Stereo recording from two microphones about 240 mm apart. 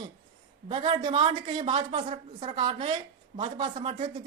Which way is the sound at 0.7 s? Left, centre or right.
Right.